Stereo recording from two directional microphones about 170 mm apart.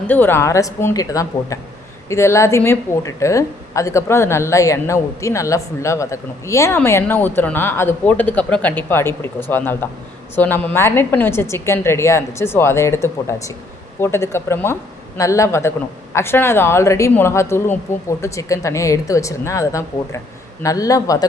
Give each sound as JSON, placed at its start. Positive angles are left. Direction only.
{"t": 0.1, "sound": "a woman's voice", "side_deg": 10}